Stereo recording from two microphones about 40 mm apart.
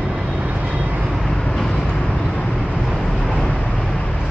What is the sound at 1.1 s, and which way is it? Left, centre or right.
Vehicle, centre.